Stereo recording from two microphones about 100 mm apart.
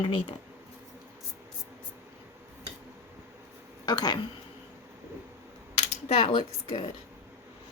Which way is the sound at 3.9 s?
45° left (ahead or behind).